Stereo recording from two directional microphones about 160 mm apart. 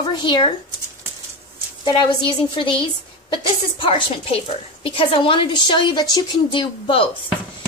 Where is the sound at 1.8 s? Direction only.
30° left (ahead or behind).